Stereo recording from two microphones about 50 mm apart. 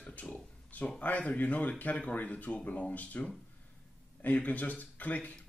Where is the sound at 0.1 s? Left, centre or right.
Left.